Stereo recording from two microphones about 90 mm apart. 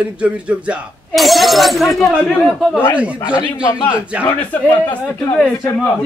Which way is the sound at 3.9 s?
15° right (ahead or behind).